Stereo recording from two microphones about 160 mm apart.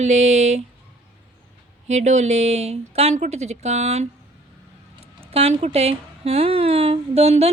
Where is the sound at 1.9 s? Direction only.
45° right (ahead or behind).